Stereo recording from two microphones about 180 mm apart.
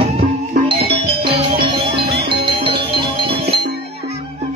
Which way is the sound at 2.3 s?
30° right (ahead or behind).